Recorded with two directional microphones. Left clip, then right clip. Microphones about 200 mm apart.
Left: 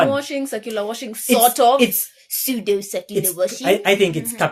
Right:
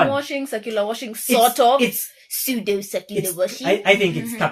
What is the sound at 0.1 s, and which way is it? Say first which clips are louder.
Speech: left 1 dB; 25° left (ahead or behind).